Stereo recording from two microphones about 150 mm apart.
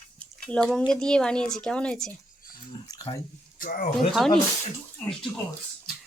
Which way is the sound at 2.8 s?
25° left (ahead or behind).